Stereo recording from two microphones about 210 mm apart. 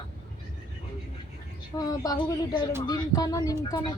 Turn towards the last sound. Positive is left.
turn(degrees=20)  # may be behind; listen again after turning